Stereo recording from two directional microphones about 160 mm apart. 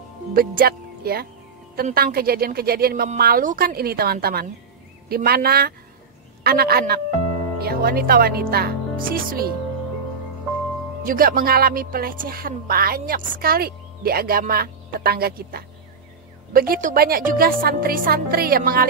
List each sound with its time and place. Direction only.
0.3 s speech: 65° right (ahead or behind)
11.1 s speech: 65° right (ahead or behind)